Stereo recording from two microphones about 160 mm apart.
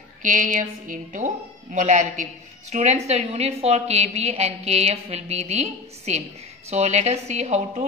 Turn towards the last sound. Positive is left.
turn(degrees=-45)  # may be behind; listen again after turning